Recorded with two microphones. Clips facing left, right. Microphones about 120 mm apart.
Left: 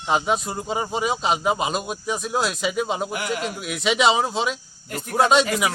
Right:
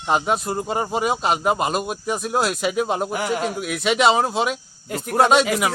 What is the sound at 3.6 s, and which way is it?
Speech, centre (ahead or behind).